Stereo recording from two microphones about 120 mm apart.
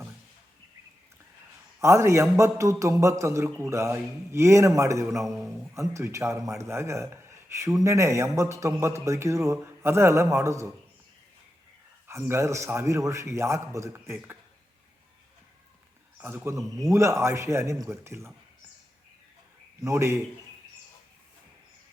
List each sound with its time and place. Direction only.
1.8 s a man's voice: 25° right (ahead or behind)
12.3 s a man's voice: 25° right (ahead or behind)
16.1 s a man's voice: 20° right (ahead or behind)
19.8 s a man's voice: 25° right (ahead or behind)